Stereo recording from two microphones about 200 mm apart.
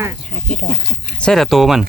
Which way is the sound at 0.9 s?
5° left (ahead or behind).